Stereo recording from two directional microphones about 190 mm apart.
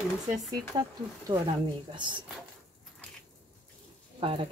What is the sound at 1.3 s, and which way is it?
Speech, 20° right (ahead or behind).